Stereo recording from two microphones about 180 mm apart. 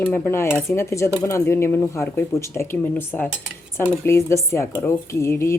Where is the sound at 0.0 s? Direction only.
10° left (ahead or behind).